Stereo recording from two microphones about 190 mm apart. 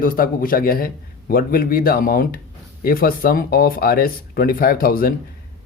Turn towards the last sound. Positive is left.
turn(degrees=50)  # may be behind; listen again after turning